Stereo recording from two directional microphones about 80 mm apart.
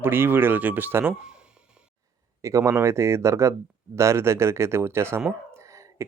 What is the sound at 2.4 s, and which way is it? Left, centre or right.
Speech, right.